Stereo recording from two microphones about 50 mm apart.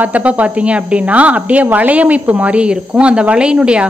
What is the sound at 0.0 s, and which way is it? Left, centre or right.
A woman's voice, right.